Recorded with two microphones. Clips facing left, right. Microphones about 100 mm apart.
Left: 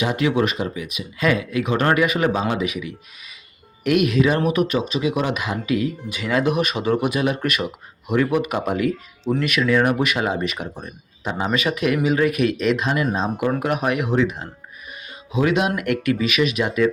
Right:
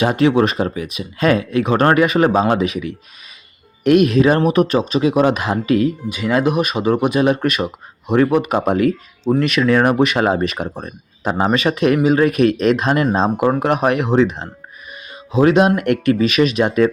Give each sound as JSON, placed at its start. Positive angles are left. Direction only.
{"t": 0.0, "sound": "speech", "side_deg": -35}
{"t": 6.1, "sound": "speech", "side_deg": -20}
{"t": 9.9, "sound": "speech", "side_deg": -30}
{"t": 10.2, "sound": "speech", "side_deg": -45}
{"t": 11.3, "sound": "a man's voice", "side_deg": -45}
{"t": 11.5, "sound": "speech", "side_deg": -35}